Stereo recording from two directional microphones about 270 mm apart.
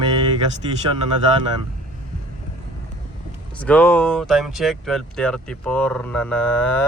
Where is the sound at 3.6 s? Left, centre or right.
Centre.